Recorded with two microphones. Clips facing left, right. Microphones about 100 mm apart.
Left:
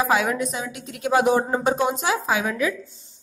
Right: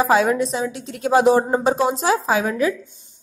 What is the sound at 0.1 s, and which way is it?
A woman's voice, 30° right (ahead or behind).